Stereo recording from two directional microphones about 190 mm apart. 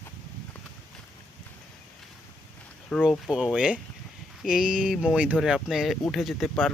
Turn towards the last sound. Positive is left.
turn(degrees=0)  # may be behind; listen again after turning